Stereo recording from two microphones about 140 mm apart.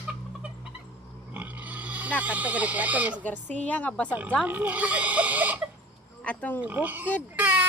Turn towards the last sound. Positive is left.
turn(degrees=-10)  # may be behind; listen again after turning